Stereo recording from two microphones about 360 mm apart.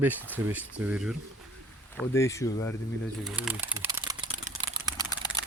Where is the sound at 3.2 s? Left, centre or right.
Centre.